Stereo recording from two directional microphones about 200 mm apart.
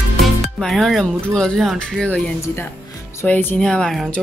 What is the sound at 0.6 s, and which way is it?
Speech, centre (ahead or behind).